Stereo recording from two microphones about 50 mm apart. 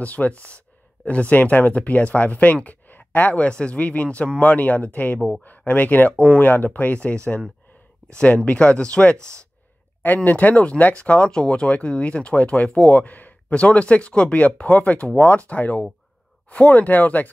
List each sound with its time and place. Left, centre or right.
0.0 s speech: left
1.3 s speech: left
8.5 s speech: left
10.0 s speech: left